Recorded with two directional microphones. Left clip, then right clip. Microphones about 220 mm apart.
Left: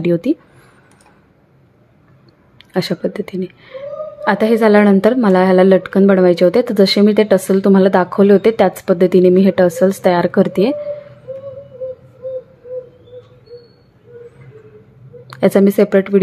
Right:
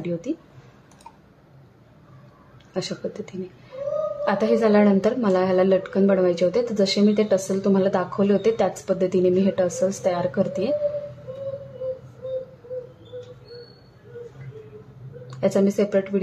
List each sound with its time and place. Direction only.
0.0 s a woman's voice: 35° left (ahead or behind)
2.7 s a woman's voice: 35° left (ahead or behind)
15.2 s speech: 35° left (ahead or behind)